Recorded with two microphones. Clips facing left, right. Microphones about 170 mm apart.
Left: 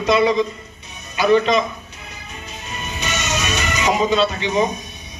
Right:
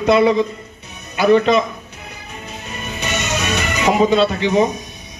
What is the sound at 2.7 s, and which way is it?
Music, 55° right (ahead or behind).